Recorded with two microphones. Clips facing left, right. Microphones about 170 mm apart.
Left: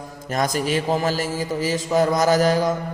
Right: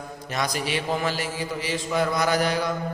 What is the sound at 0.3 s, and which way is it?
A man's voice, 45° left (ahead or behind).